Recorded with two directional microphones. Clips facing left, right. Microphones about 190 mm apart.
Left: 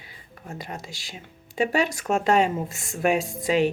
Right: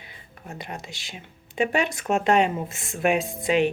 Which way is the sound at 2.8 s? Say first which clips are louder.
Right 1 dB; 45° left (ahead or behind).